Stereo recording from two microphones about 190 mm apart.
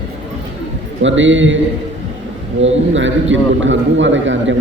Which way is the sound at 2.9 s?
80° right.